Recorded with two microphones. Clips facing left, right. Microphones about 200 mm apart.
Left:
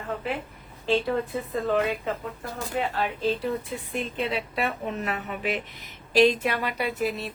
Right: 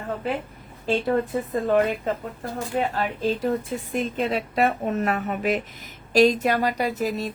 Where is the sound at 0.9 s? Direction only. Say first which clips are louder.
Right 2 dB; 45° right (ahead or behind).